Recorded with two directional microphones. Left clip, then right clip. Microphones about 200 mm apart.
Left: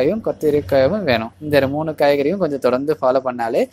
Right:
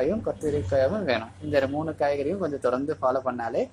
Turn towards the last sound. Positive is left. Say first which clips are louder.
# left 9 dB
turn(degrees=35)  # may be behind; listen again after turning